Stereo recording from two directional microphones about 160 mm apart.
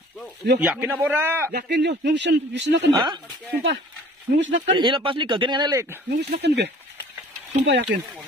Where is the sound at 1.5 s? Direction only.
85° right.